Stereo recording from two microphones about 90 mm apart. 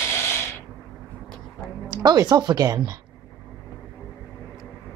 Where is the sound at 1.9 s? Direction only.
50° right (ahead or behind).